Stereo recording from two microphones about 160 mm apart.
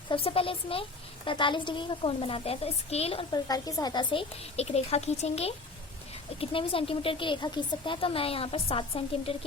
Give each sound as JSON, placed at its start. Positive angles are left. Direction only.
{"t": 0.1, "sound": "a woman's voice", "side_deg": 35}
{"t": 3.3, "sound": "a woman's voice", "side_deg": 25}